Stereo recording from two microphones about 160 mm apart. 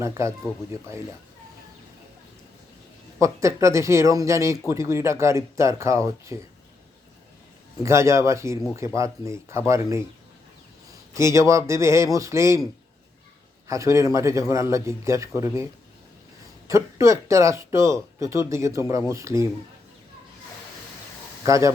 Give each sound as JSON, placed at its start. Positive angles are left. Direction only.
{"t": 0.2, "sound": "speech", "side_deg": -15}
{"t": 3.2, "sound": "a man's voice", "side_deg": -20}
{"t": 7.8, "sound": "speech", "side_deg": -20}
{"t": 11.1, "sound": "a man's voice", "side_deg": -20}
{"t": 13.7, "sound": "a man's voice", "side_deg": -20}
{"t": 16.6, "sound": "a man's voice", "side_deg": -20}
{"t": 21.4, "sound": "a man's voice", "side_deg": -20}